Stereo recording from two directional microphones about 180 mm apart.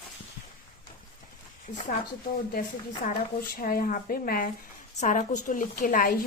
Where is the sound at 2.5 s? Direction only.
45° left (ahead or behind).